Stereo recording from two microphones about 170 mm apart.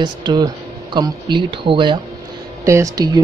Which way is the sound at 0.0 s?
25° right (ahead or behind).